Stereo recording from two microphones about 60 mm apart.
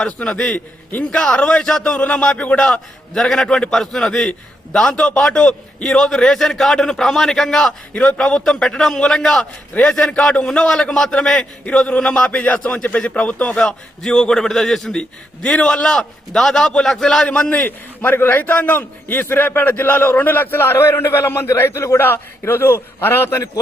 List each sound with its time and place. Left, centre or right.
0.0 s a man's voice: centre
3.2 s a man's voice: centre
17.6 s a man's voice: left